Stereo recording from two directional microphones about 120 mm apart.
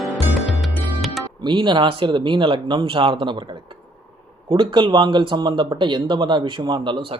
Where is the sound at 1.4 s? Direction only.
40° right (ahead or behind).